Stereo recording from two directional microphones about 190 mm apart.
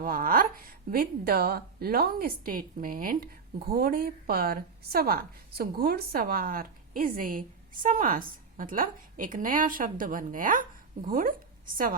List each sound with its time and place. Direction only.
0.0 s a woman's voice: 50° right (ahead or behind)